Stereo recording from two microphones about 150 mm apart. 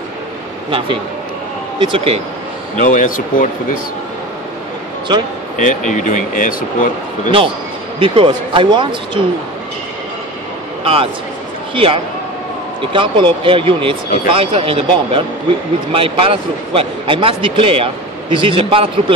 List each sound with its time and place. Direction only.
0.7 s speech: 35° right (ahead or behind)
2.8 s speech: 60° left (ahead or behind)
5.6 s speech: 55° left (ahead or behind)
7.2 s speech: 35° right (ahead or behind)
10.8 s a man's voice: 40° right (ahead or behind)